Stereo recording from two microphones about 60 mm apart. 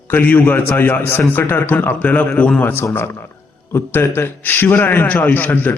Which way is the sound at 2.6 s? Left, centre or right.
Left.